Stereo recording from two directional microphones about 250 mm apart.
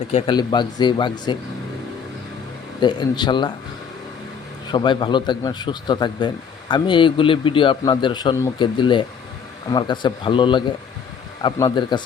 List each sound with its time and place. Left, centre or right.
0.1 s speech: left
2.8 s speech: centre
4.7 s a man's voice: centre